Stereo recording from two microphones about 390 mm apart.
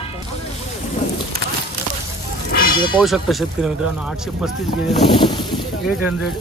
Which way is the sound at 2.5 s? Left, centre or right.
Left.